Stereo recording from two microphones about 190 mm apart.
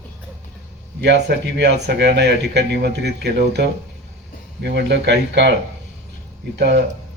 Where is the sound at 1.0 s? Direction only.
65° right (ahead or behind).